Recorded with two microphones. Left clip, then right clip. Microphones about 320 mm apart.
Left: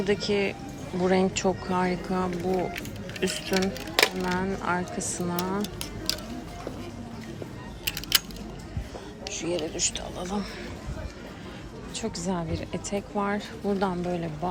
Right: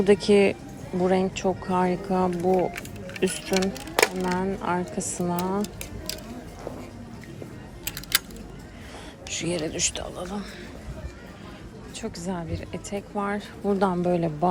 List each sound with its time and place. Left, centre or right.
0.0 s a woman's voice: centre
9.3 s speech: right
10.0 s a woman's voice: centre
11.9 s a woman's voice: centre